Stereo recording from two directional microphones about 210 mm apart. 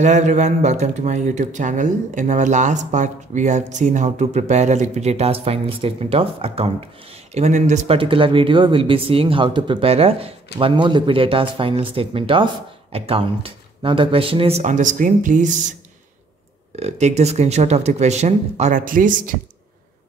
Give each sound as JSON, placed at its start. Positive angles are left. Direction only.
{"t": 0.0, "sound": "speech", "side_deg": -35}
{"t": 16.7, "sound": "speech", "side_deg": -30}